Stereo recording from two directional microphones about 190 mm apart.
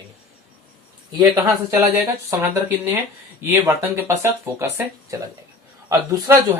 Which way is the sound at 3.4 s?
10° right (ahead or behind).